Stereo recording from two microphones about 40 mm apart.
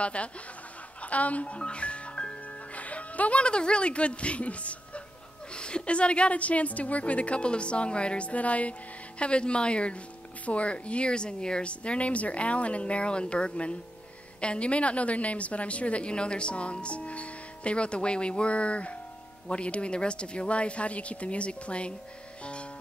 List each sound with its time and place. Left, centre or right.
0.0 s speech: left
1.0 s music: left
5.5 s a woman's voice: left
22.4 s music: left